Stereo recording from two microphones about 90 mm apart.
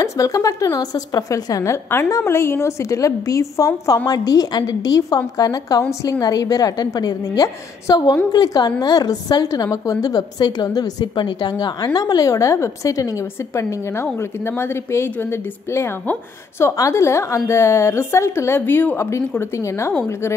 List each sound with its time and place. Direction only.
0.0 s a woman's voice: 35° left (ahead or behind)